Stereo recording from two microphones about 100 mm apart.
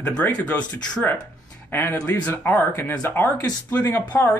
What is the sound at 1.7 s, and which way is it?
A man's voice, 20° left (ahead or behind).